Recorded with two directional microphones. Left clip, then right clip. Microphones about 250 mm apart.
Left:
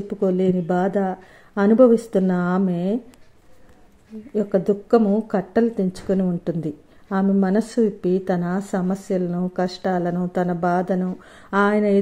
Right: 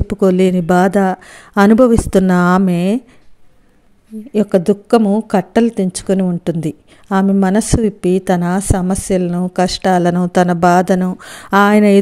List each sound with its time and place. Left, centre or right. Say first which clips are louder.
0.1 s a woman's voice: right 8 dB; right
4.3 s a woman's voice: right 7 dB; right